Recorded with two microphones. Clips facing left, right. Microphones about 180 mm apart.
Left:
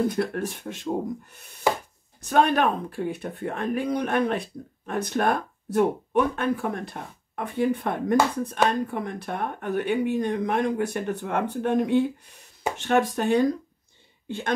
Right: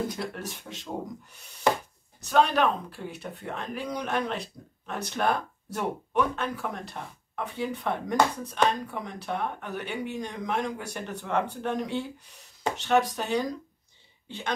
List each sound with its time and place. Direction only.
0.1 s speech: 55° left (ahead or behind)
2.2 s speech: 55° left (ahead or behind)